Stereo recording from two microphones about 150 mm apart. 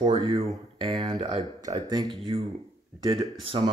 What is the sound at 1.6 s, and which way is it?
Speech, 25° right (ahead or behind).